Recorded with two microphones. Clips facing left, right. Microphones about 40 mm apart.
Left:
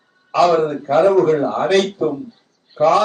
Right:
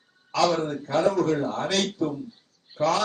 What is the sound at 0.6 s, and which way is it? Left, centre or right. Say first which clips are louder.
A man's voice: left 10 dB; left.